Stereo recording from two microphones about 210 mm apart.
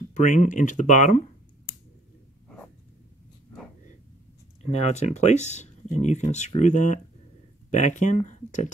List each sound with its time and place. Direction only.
0.1 s speech: 35° left (ahead or behind)
2.4 s dog: 5° left (ahead or behind)
4.6 s speech: 30° left (ahead or behind)